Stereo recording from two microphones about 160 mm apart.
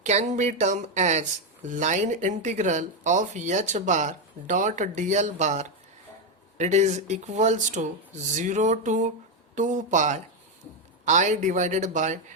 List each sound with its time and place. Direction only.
0.0 s speech: 45° right (ahead or behind)